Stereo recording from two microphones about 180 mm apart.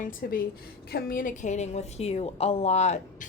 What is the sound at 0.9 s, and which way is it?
A woman's voice, 50° left (ahead or behind).